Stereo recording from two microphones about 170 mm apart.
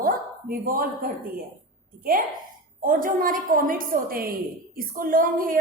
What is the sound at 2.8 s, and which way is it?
A woman's voice, 55° right (ahead or behind).